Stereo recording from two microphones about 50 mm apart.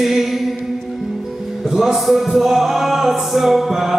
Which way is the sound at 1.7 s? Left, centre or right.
Centre.